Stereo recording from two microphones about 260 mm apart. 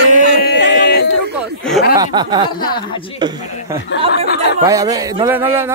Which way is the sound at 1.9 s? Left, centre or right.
Centre.